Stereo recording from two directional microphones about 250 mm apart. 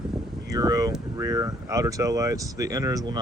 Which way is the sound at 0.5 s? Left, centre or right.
Centre.